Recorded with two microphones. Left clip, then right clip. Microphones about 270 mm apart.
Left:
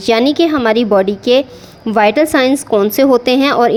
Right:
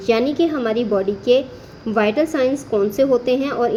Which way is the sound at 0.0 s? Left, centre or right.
Left.